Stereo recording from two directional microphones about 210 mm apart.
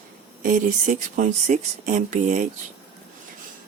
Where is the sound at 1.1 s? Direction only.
40° right (ahead or behind).